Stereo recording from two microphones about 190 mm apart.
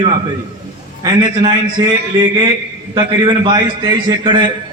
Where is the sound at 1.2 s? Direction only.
25° right (ahead or behind).